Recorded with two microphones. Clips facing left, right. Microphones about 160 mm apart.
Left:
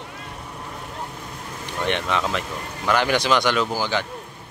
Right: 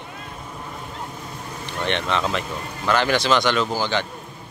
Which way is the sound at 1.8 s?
10° left (ahead or behind).